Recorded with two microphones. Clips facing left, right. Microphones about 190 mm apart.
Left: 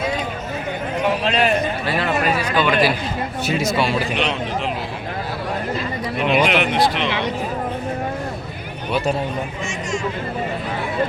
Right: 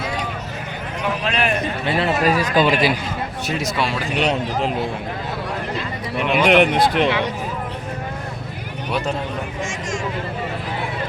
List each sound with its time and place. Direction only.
1.2 s a man's voice: 25° left (ahead or behind)
2.0 s speech: 35° right (ahead or behind)
3.4 s speech: centre (ahead or behind)
4.2 s speech: 40° right (ahead or behind)
6.2 s speech: 55° right (ahead or behind)